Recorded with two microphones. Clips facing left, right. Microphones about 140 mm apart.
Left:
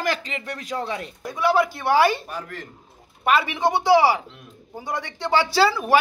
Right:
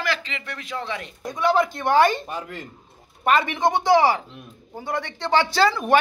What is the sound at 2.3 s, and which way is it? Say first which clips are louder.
Speech: right 1 dB; 15° right (ahead or behind).